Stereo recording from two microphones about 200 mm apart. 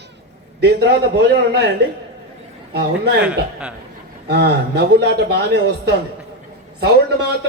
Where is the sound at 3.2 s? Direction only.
5° right (ahead or behind).